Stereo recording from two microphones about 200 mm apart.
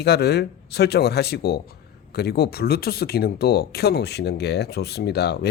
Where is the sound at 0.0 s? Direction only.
55° left (ahead or behind).